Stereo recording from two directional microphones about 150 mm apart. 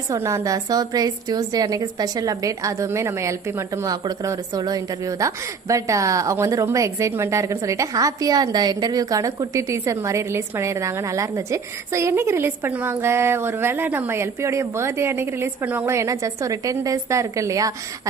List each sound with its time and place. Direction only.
0.1 s a woman's voice: 20° right (ahead or behind)